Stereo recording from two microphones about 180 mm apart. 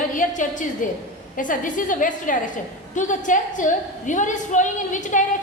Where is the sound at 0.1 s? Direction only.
45° left (ahead or behind).